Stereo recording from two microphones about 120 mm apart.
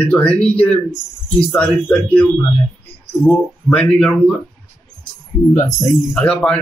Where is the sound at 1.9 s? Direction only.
10° left (ahead or behind).